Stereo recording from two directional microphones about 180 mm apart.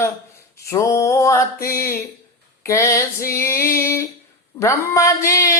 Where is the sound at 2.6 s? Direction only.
15° left (ahead or behind).